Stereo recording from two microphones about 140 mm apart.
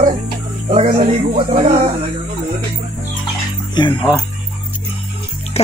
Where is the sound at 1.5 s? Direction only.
50° right (ahead or behind).